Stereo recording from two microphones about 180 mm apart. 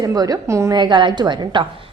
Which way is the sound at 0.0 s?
20° right (ahead or behind).